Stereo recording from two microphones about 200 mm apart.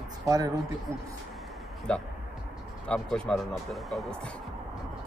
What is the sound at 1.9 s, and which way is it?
Speech, 5° left (ahead or behind).